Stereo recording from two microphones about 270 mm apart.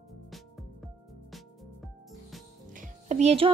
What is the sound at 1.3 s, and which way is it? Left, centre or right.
Music, centre.